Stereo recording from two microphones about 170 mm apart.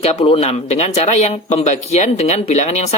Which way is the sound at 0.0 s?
35° left (ahead or behind).